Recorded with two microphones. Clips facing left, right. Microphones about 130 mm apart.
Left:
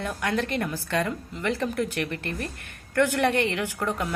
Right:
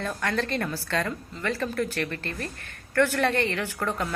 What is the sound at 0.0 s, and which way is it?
A woman's voice, 15° left (ahead or behind).